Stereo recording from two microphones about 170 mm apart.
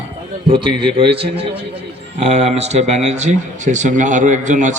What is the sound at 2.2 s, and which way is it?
A man's voice, 40° right (ahead or behind).